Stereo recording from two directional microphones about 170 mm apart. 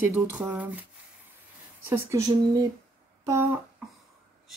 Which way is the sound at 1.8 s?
15° right (ahead or behind).